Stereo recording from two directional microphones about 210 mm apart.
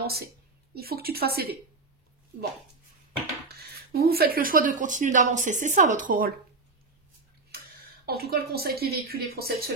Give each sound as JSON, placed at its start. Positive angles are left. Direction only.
{"t": 0.7, "sound": "a woman's voice", "side_deg": -45}
{"t": 3.4, "sound": "speech", "side_deg": -50}
{"t": 7.5, "sound": "speech", "side_deg": -50}